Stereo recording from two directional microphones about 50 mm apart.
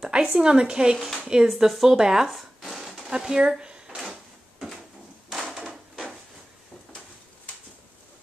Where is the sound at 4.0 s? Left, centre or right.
Centre.